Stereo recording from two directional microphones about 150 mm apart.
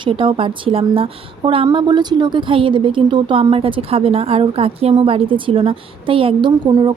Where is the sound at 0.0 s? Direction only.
35° right (ahead or behind).